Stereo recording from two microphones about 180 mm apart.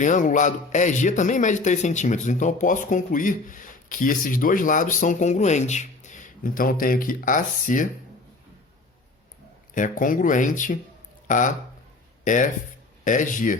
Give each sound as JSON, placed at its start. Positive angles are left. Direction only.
{"t": 0.0, "sound": "a man's voice", "side_deg": 45}
{"t": 9.7, "sound": "a man's voice", "side_deg": 45}